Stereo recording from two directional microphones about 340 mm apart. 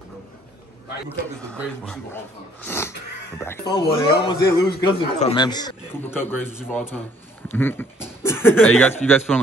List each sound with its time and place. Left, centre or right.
2.6 s a sound: centre
3.3 s a man's voice: centre
4.4 s a man's voice: left
4.8 s a man's voice: centre